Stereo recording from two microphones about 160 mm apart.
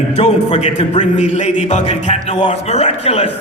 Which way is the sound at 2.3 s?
35° left (ahead or behind).